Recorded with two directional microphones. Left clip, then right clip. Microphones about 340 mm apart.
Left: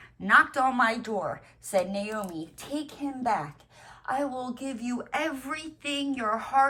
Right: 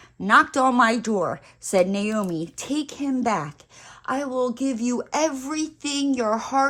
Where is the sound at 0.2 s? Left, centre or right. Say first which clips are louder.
Right 4 dB; centre.